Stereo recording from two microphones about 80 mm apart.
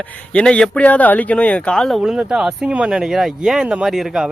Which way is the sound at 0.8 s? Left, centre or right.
Centre.